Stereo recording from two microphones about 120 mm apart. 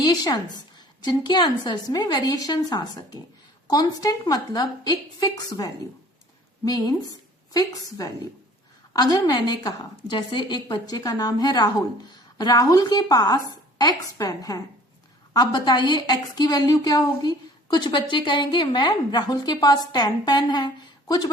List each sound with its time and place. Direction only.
0.0 s a woman's voice: 35° left (ahead or behind)